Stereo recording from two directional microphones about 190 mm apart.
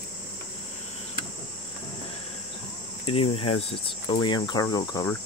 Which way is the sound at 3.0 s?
30° left (ahead or behind).